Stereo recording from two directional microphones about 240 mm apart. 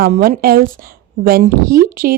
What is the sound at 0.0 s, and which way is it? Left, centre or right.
Speech, right.